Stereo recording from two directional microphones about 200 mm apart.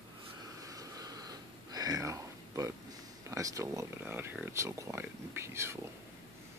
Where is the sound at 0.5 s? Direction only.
15° right (ahead or behind).